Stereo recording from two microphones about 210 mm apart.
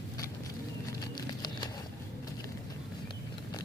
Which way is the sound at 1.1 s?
20° left (ahead or behind).